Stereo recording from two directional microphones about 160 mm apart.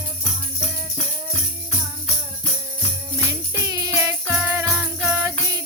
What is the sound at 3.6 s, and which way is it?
Music, 20° right (ahead or behind).